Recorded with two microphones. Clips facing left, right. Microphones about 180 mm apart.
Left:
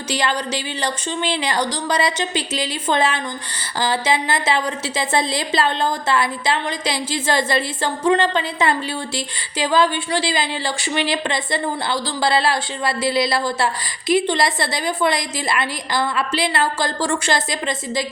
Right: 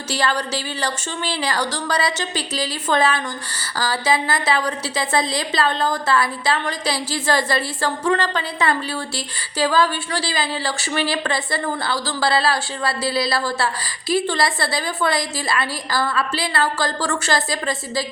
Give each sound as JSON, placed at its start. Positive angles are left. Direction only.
{"t": 0.1, "sound": "a woman's voice", "side_deg": 20}